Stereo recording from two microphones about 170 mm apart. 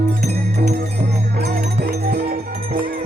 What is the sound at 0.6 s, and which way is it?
Music, 70° right (ahead or behind).